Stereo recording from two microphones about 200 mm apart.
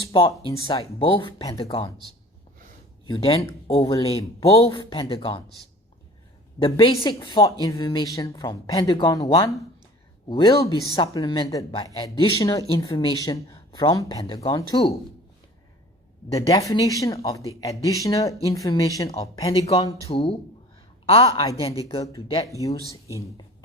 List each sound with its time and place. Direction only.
0.0 s speech: 25° left (ahead or behind)
3.1 s speech: 25° left (ahead or behind)
6.6 s speech: 25° left (ahead or behind)
16.3 s speech: 15° left (ahead or behind)
19.5 s speech: 30° left (ahead or behind)
21.3 s speech: 25° left (ahead or behind)
22.6 s speech: 15° left (ahead or behind)
23.2 s a sound: 20° left (ahead or behind)